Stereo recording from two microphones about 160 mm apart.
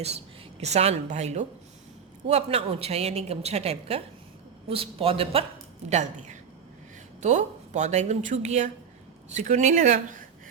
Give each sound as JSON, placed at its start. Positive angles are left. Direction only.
{"t": 0.6, "sound": "a woman's voice", "side_deg": -40}
{"t": 5.9, "sound": "speech", "side_deg": -45}